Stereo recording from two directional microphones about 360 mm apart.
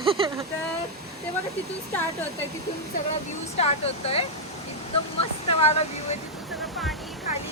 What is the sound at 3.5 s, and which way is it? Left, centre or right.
Speech, centre.